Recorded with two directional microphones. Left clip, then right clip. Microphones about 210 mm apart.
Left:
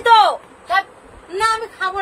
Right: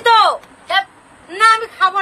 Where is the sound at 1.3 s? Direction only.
5° left (ahead or behind).